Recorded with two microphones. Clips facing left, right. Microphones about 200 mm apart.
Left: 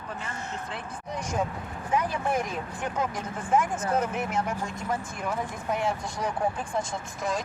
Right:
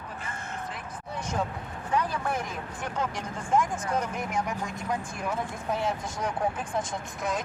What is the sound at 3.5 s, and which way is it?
Speech, 5° left (ahead or behind).